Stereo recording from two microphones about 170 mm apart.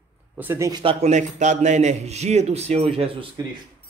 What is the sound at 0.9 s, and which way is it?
A man's voice, 45° right (ahead or behind).